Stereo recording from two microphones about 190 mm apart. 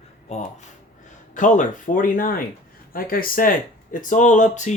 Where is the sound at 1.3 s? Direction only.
40° left (ahead or behind).